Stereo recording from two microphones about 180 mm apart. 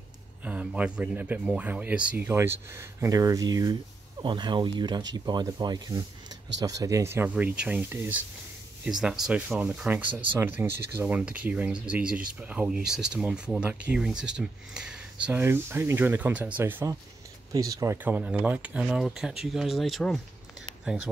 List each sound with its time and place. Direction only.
0.4 s speech: 10° right (ahead or behind)
18.0 s speech: 10° right (ahead or behind)